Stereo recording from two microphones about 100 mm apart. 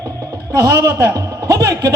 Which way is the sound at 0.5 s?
35° right (ahead or behind).